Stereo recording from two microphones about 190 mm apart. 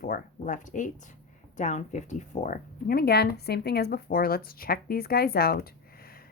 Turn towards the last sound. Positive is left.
turn(degrees=50)  # may be behind; listen again after turning